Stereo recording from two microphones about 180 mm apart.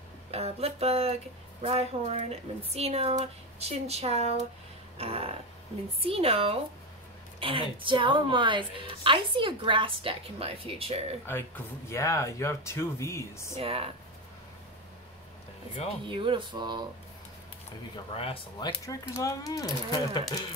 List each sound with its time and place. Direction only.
0.3 s speech: 35° right (ahead or behind)
4.9 s a sound: 35° right (ahead or behind)
6.0 s a woman's voice: 30° right (ahead or behind)
11.2 s speech: 10° left (ahead or behind)
13.6 s speech: 30° right (ahead or behind)
16.1 s a woman's voice: 25° right (ahead or behind)
17.9 s speech: 30° left (ahead or behind)